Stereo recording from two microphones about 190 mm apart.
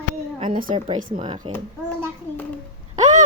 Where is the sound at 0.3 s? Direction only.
25° right (ahead or behind).